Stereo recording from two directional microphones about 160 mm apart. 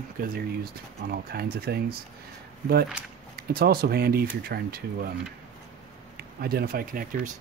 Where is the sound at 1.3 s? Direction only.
75° right (ahead or behind).